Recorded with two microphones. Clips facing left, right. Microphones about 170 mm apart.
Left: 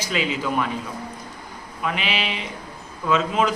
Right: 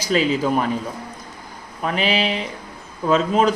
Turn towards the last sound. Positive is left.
turn(degrees=-40)  # may be behind; listen again after turning